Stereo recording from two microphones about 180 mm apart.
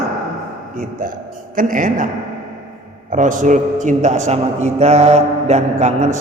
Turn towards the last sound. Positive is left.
turn(degrees=-40)  # may be behind; listen again after turning